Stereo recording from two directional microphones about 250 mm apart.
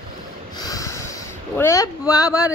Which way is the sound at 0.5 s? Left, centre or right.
Centre.